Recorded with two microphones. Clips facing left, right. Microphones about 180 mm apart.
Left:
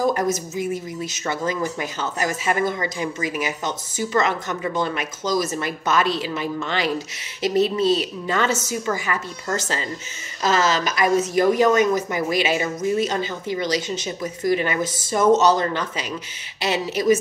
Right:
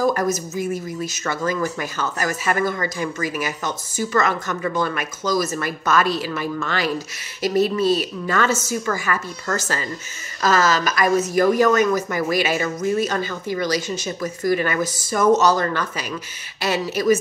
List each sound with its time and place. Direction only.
0.0 s speech: 20° left (ahead or behind)